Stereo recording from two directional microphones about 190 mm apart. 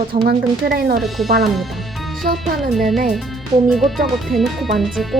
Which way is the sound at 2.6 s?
Centre (ahead or behind).